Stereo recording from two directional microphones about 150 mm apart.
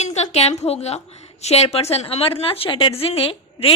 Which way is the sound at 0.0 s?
50° left (ahead or behind).